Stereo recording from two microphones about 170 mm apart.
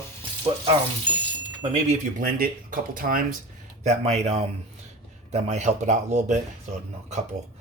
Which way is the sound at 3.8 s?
40° right (ahead or behind).